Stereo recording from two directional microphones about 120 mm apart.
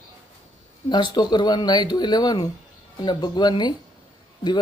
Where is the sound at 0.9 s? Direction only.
40° left (ahead or behind).